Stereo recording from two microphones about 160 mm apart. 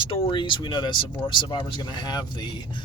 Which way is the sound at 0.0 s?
35° left (ahead or behind).